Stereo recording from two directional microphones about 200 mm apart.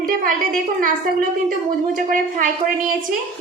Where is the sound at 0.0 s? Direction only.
45° right (ahead or behind).